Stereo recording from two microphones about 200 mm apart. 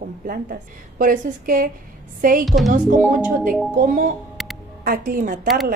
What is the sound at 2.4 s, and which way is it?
Speech, centre (ahead or behind).